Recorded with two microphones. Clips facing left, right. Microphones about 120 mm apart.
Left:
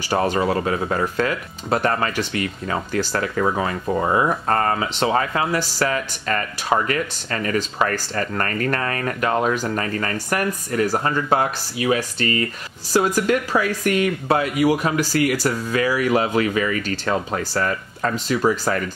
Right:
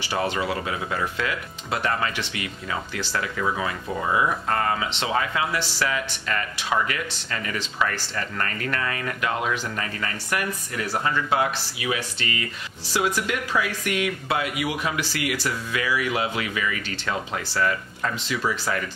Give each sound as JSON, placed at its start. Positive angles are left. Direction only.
{"t": 0.1, "sound": "speech", "side_deg": 45}